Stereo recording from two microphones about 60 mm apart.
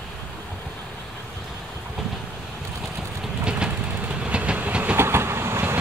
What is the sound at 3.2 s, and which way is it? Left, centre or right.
Train, centre.